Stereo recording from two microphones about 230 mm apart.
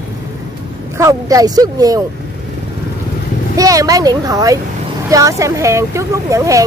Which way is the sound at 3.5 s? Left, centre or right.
Centre.